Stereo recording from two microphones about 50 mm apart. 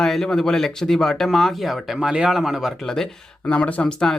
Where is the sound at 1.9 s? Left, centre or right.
Centre.